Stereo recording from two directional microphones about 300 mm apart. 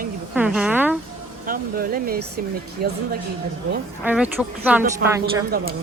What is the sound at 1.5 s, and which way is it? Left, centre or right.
Speech, right.